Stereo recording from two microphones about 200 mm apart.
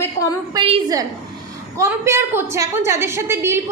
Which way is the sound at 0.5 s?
20° right (ahead or behind).